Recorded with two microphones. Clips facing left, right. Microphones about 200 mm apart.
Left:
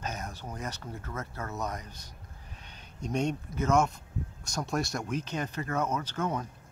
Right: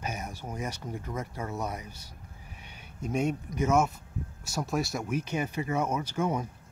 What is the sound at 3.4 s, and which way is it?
Speech, 10° right (ahead or behind).